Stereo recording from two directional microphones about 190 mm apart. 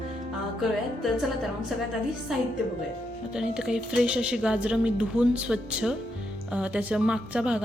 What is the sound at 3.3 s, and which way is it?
A woman's voice, 5° right (ahead or behind).